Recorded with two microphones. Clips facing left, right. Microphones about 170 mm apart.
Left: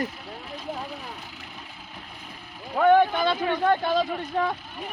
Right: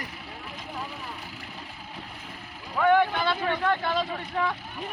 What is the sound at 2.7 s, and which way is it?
A man's voice, 45° left (ahead or behind).